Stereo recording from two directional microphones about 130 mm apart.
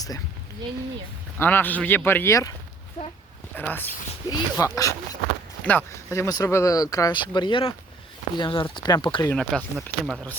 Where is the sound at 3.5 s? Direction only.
15° left (ahead or behind).